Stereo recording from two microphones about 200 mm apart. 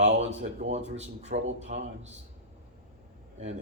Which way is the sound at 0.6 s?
35° right (ahead or behind).